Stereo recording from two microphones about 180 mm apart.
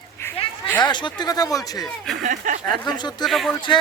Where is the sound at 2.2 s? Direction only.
45° right (ahead or behind).